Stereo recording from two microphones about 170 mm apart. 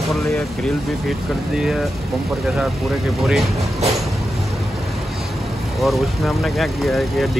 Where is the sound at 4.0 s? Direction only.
Centre (ahead or behind).